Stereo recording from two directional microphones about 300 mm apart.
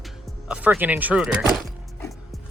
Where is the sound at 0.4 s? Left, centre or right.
Centre.